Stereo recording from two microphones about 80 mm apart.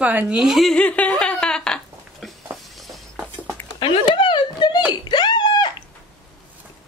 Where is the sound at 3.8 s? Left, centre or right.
Left.